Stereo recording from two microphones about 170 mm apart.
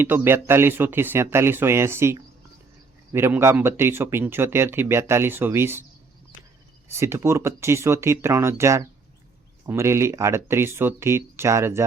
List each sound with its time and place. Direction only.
0.0 s speech: 15° right (ahead or behind)
6.8 s speech: 15° right (ahead or behind)